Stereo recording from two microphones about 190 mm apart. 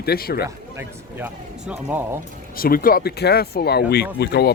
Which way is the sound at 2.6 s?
50° left (ahead or behind).